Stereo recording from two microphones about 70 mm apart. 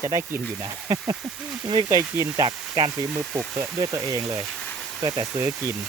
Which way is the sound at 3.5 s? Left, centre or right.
Right.